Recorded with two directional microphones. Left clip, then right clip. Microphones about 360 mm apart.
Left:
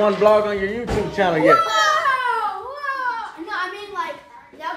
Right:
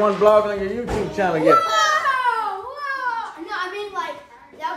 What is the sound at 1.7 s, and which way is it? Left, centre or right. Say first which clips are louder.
Speech: even; centre.